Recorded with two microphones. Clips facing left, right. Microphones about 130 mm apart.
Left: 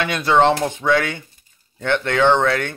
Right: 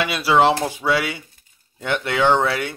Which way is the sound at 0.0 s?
5° right (ahead or behind).